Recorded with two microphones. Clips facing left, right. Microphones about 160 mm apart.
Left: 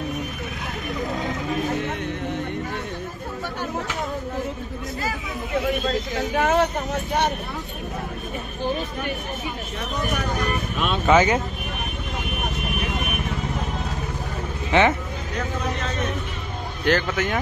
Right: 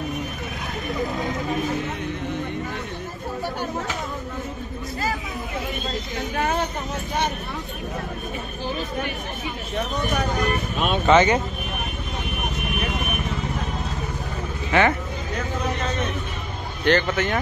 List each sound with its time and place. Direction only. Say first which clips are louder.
6.4 s speech: left 5 dB; 75° left (ahead or behind)
11.1 s speech: right 1 dB; 5° left (ahead or behind)
14.7 s speech: left 1 dB; 20° left (ahead or behind)
16.8 s speech: right 2 dB; 5° left (ahead or behind)